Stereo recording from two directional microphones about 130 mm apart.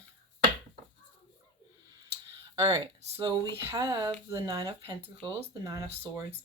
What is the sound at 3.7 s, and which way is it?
Speech, 25° right (ahead or behind).